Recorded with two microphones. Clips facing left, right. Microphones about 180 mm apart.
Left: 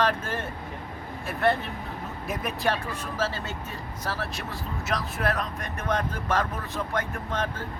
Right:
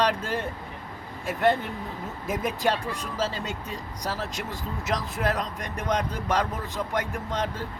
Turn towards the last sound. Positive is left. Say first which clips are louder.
# right 1 dB
turn(degrees=-15)  # may be behind; listen again after turning